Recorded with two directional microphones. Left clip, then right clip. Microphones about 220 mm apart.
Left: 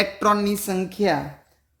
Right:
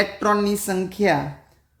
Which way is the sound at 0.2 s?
30° left (ahead or behind).